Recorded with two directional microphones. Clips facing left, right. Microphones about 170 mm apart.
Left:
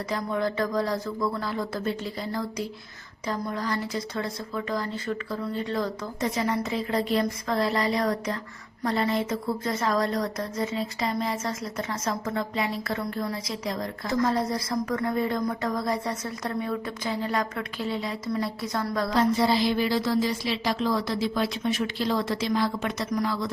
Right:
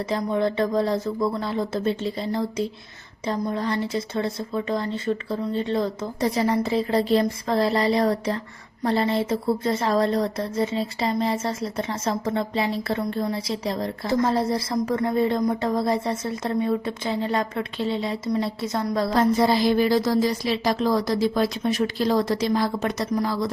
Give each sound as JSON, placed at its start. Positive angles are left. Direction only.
{"t": 0.1, "sound": "a woman's voice", "side_deg": -25}
{"t": 19.1, "sound": "a woman's voice", "side_deg": -45}